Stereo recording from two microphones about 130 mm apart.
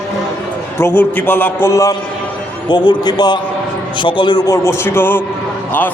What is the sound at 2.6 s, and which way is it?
A man's voice, 35° left (ahead or behind).